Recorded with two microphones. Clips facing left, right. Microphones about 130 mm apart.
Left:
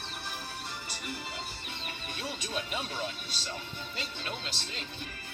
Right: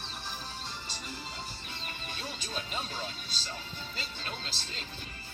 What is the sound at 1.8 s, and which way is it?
Music, 35° right (ahead or behind).